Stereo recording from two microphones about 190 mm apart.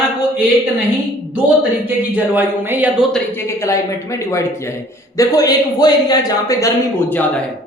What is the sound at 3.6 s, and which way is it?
A man's voice, 15° left (ahead or behind).